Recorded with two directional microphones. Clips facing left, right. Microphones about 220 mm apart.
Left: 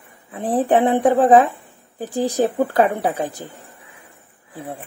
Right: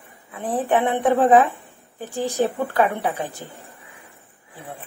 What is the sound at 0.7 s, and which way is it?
Speech, 35° left (ahead or behind).